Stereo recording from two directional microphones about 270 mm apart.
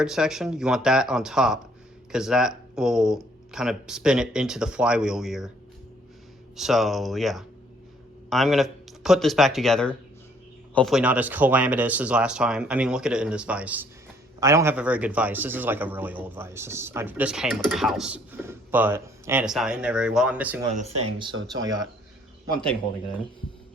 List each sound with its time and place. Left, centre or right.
0.0 s speech: centre
6.6 s a man's voice: centre